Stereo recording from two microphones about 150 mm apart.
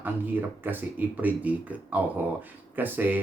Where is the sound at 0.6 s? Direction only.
10° right (ahead or behind).